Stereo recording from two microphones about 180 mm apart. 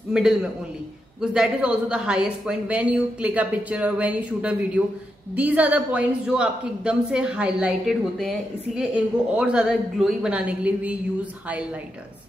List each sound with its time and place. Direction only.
0.1 s a woman's voice: 5° right (ahead or behind)